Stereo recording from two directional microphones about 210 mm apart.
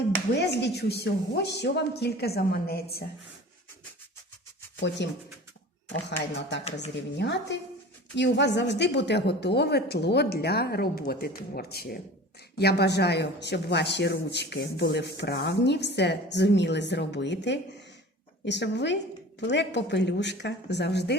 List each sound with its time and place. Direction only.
0.3 s speech: 55° left (ahead or behind)
5.0 s speech: 55° left (ahead or behind)